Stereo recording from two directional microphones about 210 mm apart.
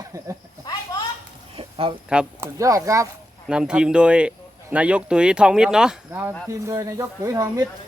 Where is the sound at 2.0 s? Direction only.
5° right (ahead or behind).